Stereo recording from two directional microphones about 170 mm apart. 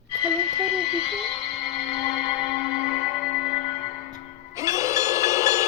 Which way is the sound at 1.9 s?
5° right (ahead or behind).